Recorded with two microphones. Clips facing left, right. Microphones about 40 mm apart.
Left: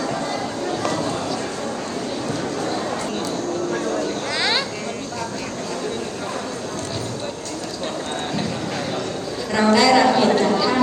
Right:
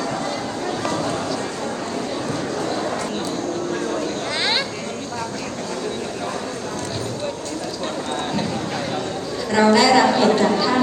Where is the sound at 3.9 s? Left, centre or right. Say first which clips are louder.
Left 1 dB; right.